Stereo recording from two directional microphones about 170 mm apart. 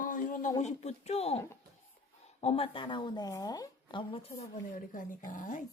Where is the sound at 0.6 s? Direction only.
40° left (ahead or behind).